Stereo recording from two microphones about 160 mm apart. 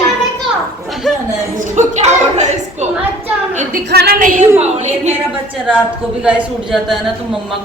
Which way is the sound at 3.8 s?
80° right.